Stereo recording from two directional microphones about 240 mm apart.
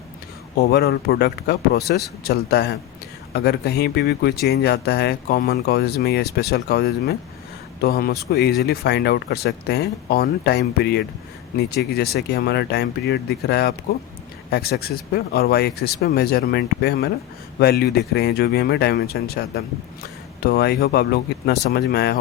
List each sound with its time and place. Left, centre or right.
0.7 s speech: left